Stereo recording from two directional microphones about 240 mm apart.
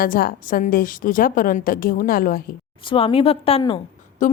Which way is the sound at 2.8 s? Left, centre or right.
Left.